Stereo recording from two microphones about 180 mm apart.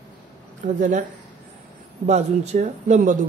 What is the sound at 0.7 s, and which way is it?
Speech, 45° right (ahead or behind).